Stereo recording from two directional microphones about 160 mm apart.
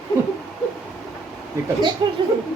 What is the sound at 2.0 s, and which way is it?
Speech, 25° right (ahead or behind).